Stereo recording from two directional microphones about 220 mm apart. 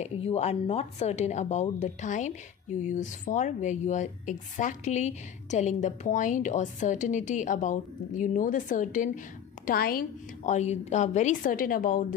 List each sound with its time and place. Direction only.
0.0 s a woman's voice: 30° left (ahead or behind)